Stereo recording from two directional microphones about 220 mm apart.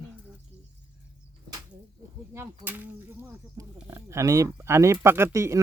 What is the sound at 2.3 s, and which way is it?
Speech, 10° right (ahead or behind).